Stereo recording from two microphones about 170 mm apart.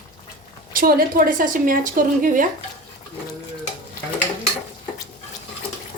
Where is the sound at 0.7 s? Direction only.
55° right (ahead or behind).